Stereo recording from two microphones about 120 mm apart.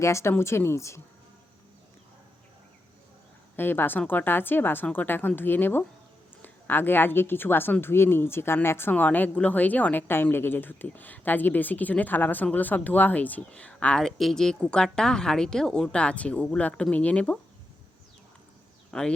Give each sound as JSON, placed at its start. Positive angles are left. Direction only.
{"t": 0.0, "sound": "speech", "side_deg": 25}
{"t": 3.5, "sound": "speech", "side_deg": 15}
{"t": 18.9, "sound": "speech", "side_deg": 5}